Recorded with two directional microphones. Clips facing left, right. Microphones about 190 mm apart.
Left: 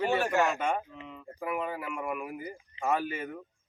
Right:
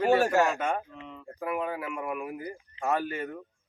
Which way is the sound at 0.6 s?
Centre (ahead or behind).